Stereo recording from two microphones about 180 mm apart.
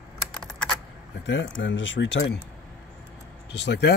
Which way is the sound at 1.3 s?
90° left.